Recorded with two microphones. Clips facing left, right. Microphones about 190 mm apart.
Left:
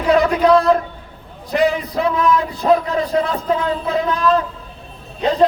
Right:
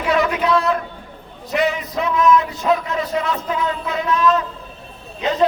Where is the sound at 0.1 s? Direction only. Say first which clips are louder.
Left 5 dB; 35° left (ahead or behind).